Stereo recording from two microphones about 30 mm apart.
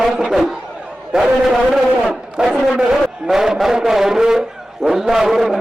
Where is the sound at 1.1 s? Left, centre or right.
Centre.